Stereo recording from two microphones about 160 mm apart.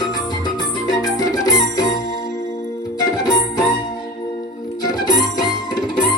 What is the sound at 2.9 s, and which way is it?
Music, 25° left (ahead or behind).